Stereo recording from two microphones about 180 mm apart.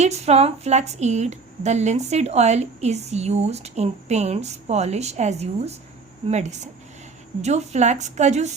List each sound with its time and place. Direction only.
0.0 s a woman's voice: 35° right (ahead or behind)